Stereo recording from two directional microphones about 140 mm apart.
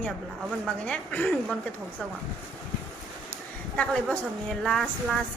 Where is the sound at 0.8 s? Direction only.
10° left (ahead or behind).